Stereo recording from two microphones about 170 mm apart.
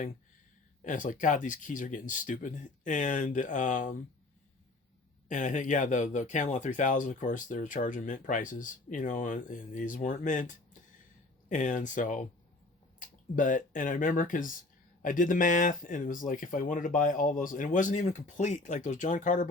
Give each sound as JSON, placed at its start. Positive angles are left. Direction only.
{"t": 0.9, "sound": "speech", "side_deg": 50}
{"t": 5.3, "sound": "speech", "side_deg": 45}